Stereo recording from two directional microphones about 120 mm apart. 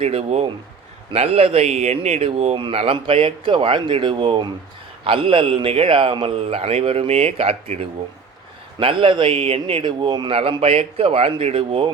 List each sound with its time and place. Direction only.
0.0 s speech: 60° right (ahead or behind)
2.7 s a man's voice: 50° right (ahead or behind)
10.6 s a man's voice: 55° right (ahead or behind)